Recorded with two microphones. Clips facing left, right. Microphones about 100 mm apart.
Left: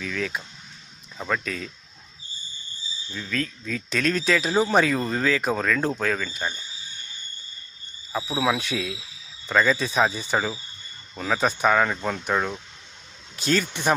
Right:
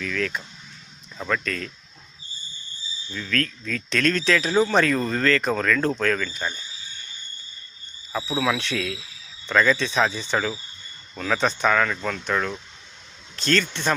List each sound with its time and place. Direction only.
0.0 s speech: 10° left (ahead or behind)
3.1 s speech: 10° left (ahead or behind)
8.1 s speech: 10° left (ahead or behind)